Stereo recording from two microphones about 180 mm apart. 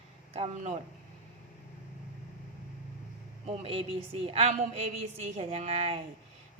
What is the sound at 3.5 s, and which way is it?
Speech, 30° right (ahead or behind).